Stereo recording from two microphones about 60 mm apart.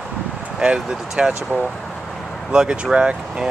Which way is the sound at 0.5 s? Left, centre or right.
Centre.